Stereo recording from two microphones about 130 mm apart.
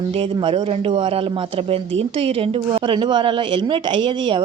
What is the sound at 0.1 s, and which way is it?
Speech, 45° right (ahead or behind).